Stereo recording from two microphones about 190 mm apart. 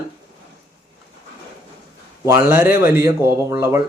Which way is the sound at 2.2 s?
10° right (ahead or behind).